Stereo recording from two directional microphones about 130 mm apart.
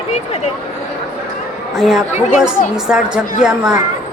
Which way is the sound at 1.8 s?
5° right (ahead or behind).